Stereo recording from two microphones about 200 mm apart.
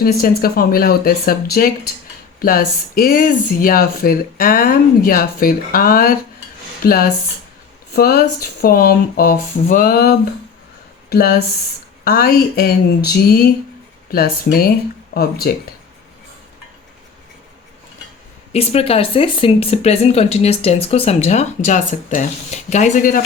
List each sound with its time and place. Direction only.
0.0 s speech: 45° left (ahead or behind)
14.1 s speech: 50° left (ahead or behind)
18.5 s speech: 30° left (ahead or behind)